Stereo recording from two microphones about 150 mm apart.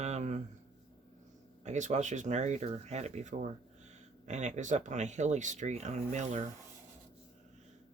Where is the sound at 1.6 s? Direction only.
50° right (ahead or behind).